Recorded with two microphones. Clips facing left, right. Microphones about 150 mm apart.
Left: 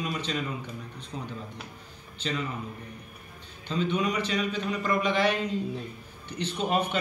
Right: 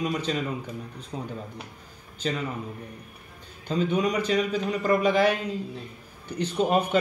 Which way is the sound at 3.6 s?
40° right (ahead or behind).